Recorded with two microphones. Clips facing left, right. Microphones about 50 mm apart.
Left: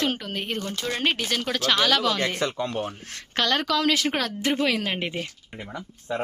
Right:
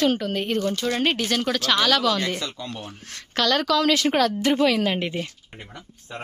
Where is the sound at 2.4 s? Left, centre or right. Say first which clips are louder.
Left 6 dB; left.